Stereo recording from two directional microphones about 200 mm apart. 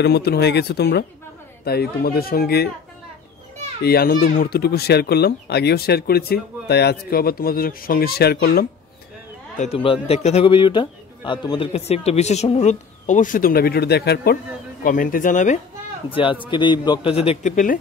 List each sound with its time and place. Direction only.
0.0 s speech: 55° left (ahead or behind)
3.8 s speech: 50° left (ahead or behind)
9.6 s a man's voice: 30° left (ahead or behind)
16.1 s a man's voice: 25° left (ahead or behind)